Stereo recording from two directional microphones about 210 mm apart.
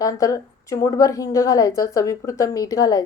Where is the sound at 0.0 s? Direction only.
15° left (ahead or behind).